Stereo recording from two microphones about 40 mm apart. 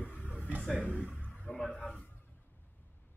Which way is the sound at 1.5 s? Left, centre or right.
Left.